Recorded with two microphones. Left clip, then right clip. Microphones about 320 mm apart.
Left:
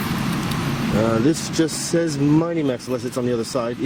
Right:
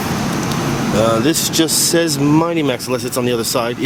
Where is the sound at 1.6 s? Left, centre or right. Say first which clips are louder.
Right 6 dB; right.